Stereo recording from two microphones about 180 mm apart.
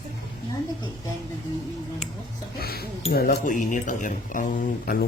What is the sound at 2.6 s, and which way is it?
Music, 60° left (ahead or behind).